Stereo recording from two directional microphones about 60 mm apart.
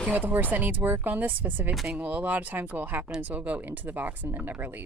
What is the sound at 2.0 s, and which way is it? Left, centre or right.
Speech, right.